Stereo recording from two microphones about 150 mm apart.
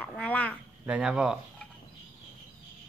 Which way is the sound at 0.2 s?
10° left (ahead or behind).